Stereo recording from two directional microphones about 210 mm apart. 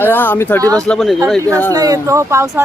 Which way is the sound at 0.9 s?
Centre (ahead or behind).